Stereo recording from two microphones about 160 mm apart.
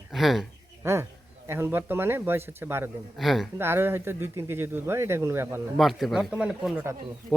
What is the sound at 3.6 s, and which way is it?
Speech, 15° right (ahead or behind).